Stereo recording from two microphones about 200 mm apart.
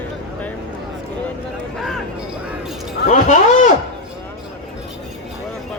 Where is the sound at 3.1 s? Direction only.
40° left (ahead or behind).